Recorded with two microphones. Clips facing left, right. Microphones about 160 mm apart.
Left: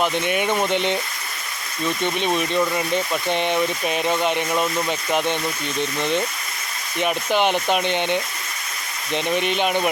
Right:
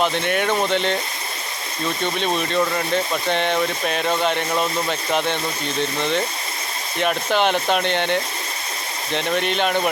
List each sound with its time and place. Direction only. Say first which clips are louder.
0.0 s speech: right 1 dB; 10° left (ahead or behind)
2.1 s speech: right 1 dB; 15° left (ahead or behind)